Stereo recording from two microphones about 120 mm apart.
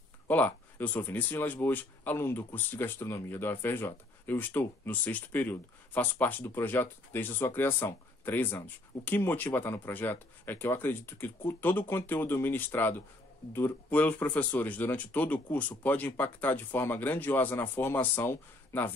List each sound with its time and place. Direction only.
0.3 s speech: 15° left (ahead or behind)